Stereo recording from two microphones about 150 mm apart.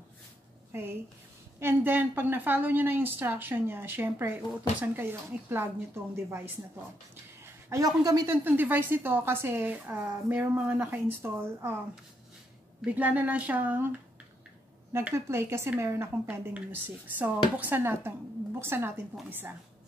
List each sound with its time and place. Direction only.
0.7 s a woman's voice: 15° right (ahead or behind)
7.7 s speech: 25° right (ahead or behind)
8.5 s a woman's voice: 10° right (ahead or behind)
12.8 s a woman's voice: 10° right (ahead or behind)